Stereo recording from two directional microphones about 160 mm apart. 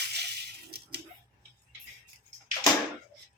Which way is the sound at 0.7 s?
90° right.